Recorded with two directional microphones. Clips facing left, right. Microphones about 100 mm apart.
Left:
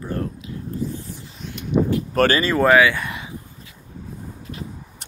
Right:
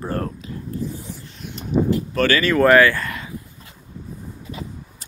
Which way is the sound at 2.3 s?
25° left (ahead or behind).